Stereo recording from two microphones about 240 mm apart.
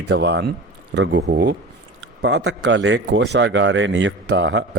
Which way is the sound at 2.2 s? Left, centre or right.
Right.